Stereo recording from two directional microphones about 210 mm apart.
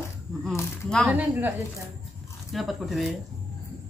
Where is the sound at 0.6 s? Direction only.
5° left (ahead or behind).